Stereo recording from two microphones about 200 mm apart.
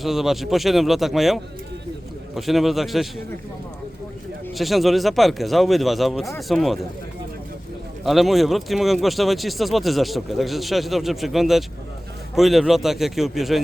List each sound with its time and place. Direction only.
0.0 s speech: centre (ahead or behind)
4.5 s speech: centre (ahead or behind)
8.0 s speech: centre (ahead or behind)